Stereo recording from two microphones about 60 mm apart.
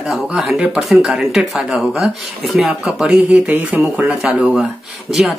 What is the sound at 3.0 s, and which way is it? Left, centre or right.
Speech, centre.